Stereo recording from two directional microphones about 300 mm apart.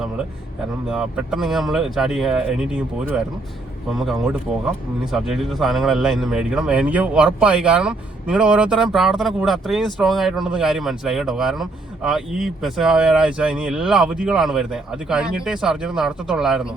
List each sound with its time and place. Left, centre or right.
0.9 s speech: centre